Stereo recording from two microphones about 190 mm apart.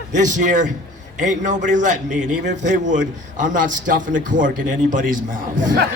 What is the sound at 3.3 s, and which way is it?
A man's voice, 45° right (ahead or behind).